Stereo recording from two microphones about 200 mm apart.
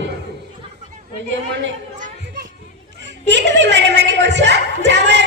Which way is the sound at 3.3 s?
60° right (ahead or behind).